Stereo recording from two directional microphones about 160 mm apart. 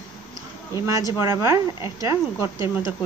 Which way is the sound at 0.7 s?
20° right (ahead or behind).